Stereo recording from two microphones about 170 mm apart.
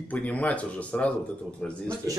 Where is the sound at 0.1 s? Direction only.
10° left (ahead or behind).